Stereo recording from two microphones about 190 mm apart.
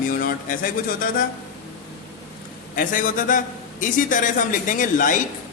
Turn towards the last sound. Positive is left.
turn(degrees=45)  # may be behind; listen again after turning